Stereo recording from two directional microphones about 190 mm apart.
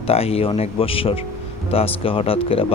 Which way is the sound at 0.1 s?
30° left (ahead or behind).